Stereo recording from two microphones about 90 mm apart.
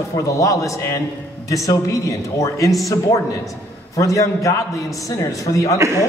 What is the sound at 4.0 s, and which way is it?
A man's voice, 35° left (ahead or behind).